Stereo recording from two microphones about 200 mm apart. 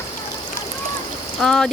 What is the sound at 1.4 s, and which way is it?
Speech, centre (ahead or behind).